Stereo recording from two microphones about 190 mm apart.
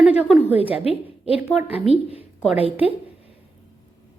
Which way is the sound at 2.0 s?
30° left (ahead or behind).